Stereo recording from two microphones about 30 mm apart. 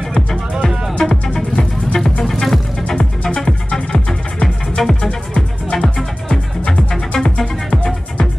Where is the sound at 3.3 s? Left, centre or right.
Left.